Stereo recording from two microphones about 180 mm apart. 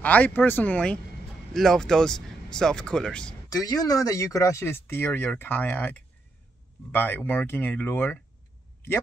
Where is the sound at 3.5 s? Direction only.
20° left (ahead or behind).